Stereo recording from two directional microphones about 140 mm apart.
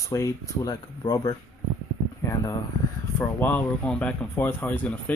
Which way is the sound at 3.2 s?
10° left (ahead or behind).